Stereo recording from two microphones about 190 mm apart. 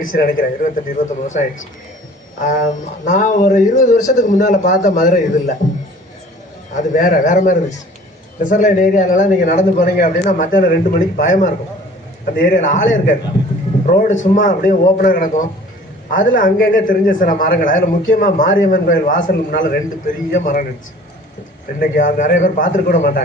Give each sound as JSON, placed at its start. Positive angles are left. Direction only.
{"t": 0.0, "sound": "a man's voice", "side_deg": 45}
{"t": 6.7, "sound": "a man's voice", "side_deg": 45}
{"t": 13.8, "sound": "a man's voice", "side_deg": 40}
{"t": 21.8, "sound": "a man's voice", "side_deg": 45}